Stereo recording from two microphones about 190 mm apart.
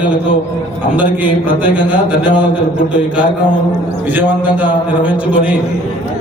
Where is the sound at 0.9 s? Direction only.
5° right (ahead or behind).